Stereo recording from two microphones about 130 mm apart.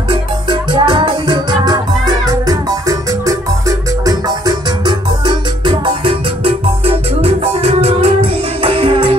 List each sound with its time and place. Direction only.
0.1 s music: 35° right (ahead or behind)